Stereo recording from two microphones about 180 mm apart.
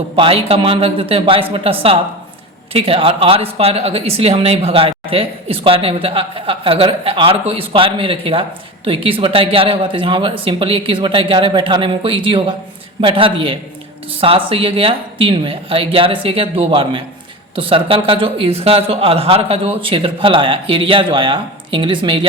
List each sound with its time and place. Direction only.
0.2 s speech: 30° right (ahead or behind)
2.7 s speech: 30° right (ahead or behind)